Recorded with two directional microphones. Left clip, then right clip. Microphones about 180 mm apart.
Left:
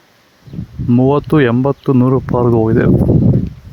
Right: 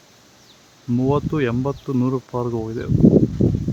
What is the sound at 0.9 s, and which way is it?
Speech, 45° left (ahead or behind).